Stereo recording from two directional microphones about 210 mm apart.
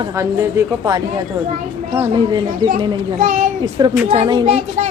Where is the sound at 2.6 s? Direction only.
20° right (ahead or behind).